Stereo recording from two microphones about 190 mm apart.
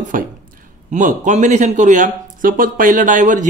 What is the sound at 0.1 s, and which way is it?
Speech, 45° right (ahead or behind).